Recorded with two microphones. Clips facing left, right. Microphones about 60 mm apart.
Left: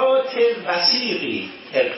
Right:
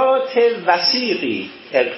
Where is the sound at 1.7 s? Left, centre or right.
Right.